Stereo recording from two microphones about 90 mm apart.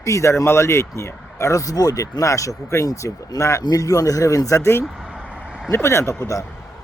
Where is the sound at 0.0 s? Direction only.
35° left (ahead or behind).